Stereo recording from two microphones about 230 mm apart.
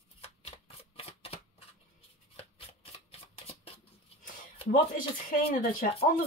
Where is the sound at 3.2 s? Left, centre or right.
Left.